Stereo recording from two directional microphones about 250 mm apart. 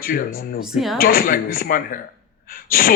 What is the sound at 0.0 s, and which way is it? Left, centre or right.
Speech, left.